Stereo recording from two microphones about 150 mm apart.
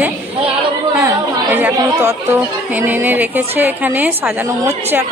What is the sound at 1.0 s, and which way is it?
Speech, 20° right (ahead or behind).